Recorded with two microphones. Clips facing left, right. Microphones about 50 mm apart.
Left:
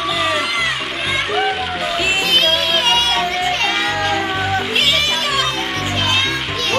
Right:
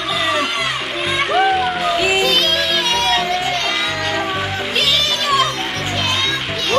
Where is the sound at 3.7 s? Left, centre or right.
Centre.